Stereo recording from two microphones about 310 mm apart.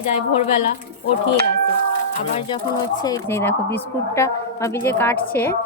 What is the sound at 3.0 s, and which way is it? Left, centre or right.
A woman's voice, centre.